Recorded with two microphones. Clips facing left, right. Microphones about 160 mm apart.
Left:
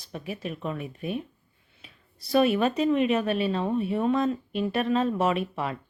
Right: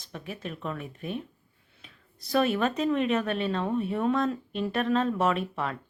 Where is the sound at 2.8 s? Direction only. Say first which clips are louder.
Left 3 dB; 5° left (ahead or behind).